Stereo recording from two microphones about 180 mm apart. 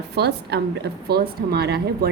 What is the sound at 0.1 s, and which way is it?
A woman's voice, 65° right (ahead or behind).